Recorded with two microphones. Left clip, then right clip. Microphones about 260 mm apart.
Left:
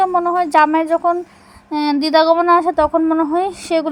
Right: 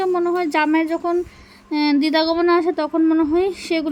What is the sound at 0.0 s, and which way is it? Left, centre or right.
Speech, centre.